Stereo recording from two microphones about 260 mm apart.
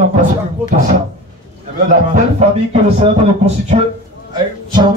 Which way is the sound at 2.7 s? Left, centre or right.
Right.